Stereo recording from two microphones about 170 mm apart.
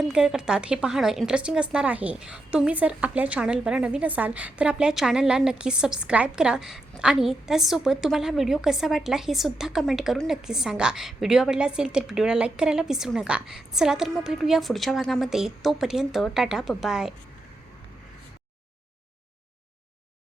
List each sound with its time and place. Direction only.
0.1 s a woman's voice: 5° right (ahead or behind)